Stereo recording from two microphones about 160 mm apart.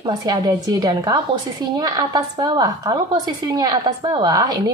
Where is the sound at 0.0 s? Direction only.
25° right (ahead or behind).